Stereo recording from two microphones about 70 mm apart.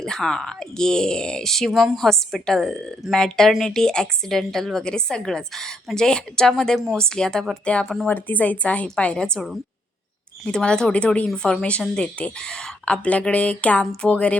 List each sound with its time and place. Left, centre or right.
0.0 s a woman's voice: centre
10.4 s speech: centre